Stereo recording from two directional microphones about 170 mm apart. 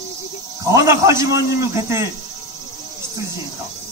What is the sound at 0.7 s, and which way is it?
Speech, 15° right (ahead or behind).